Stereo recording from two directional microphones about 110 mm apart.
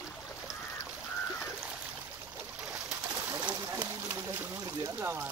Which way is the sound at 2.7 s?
10° right (ahead or behind).